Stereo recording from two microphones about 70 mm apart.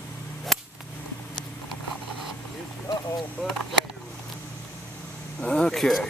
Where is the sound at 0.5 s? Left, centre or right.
Centre.